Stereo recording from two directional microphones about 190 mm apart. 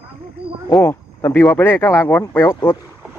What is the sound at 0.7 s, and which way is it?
Speech, 10° left (ahead or behind).